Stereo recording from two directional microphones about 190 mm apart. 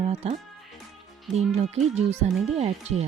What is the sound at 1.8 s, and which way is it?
Speech, centre (ahead or behind).